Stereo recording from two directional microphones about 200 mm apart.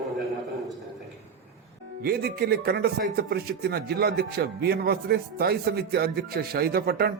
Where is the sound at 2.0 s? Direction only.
50° right (ahead or behind).